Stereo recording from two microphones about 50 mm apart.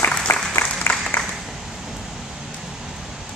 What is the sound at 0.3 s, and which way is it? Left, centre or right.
Applause, left.